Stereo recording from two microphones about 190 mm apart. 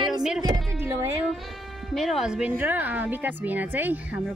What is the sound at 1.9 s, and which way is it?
Speech, centre (ahead or behind).